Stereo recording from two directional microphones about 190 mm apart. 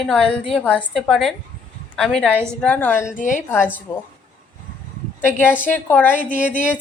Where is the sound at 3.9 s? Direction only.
20° left (ahead or behind).